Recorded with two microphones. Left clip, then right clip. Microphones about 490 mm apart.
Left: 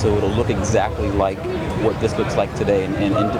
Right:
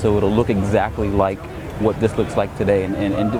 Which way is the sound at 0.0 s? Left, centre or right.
Right.